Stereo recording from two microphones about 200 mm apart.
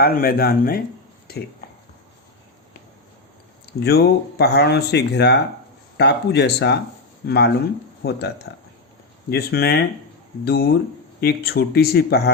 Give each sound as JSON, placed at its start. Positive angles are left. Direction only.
{"t": 0.0, "sound": "speech", "side_deg": 50}
{"t": 3.8, "sound": "speech", "side_deg": 55}